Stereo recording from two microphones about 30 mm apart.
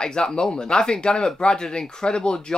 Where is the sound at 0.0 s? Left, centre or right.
Left.